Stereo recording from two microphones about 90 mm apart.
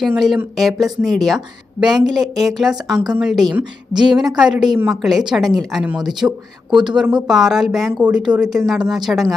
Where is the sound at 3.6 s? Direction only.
55° right (ahead or behind).